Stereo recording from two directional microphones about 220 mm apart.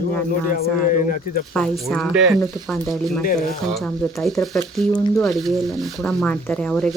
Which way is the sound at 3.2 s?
40° left (ahead or behind).